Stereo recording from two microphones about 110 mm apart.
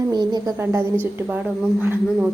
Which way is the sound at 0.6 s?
25° right (ahead or behind).